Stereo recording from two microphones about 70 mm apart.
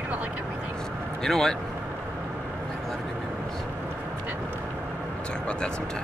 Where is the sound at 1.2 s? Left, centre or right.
Centre.